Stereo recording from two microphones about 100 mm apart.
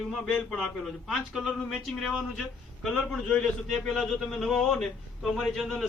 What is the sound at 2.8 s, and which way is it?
A man's voice, 5° left (ahead or behind).